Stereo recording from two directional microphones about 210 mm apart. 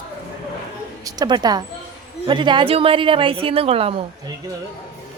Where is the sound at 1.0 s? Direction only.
20° right (ahead or behind).